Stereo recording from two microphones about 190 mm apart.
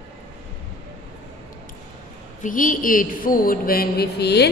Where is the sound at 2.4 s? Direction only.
45° left (ahead or behind); by 4.5 s 60° left (ahead or behind).